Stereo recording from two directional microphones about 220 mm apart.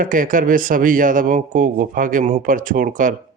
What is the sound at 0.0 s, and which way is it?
Speech, 35° right (ahead or behind).